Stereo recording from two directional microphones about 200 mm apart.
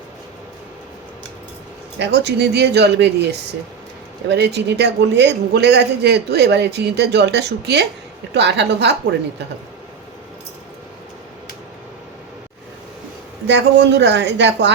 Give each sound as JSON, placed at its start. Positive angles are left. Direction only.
{"t": 2.0, "sound": "speech", "side_deg": -55}
{"t": 4.3, "sound": "speech", "side_deg": -55}
{"t": 13.5, "sound": "speech", "side_deg": -60}